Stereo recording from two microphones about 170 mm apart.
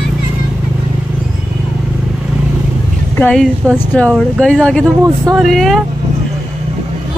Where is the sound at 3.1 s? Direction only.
5° left (ahead or behind).